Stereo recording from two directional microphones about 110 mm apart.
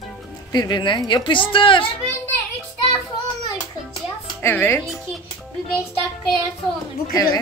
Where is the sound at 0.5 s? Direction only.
40° left (ahead or behind).